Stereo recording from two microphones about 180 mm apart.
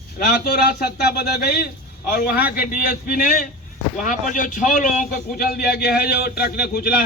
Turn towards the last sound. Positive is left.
turn(degrees=60)  # may be behind; listen again after turning